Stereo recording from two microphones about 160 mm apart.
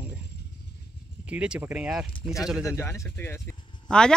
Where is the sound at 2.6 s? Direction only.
20° left (ahead or behind).